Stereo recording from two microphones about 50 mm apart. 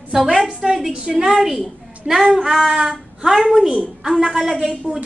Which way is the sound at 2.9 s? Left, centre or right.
Centre.